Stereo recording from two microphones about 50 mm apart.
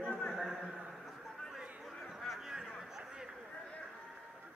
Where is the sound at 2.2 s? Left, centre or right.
Centre.